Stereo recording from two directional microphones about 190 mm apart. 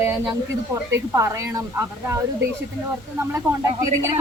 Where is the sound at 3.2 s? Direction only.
15° right (ahead or behind).